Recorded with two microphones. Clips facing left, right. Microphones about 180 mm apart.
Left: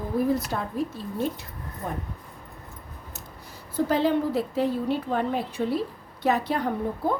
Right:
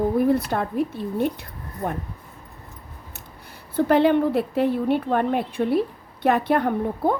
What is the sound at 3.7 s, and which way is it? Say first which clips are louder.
A woman's voice: right 5 dB; 65° right (ahead or behind).